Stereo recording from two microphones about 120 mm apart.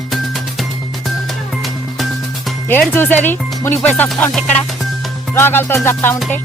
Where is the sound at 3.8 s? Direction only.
15° left (ahead or behind).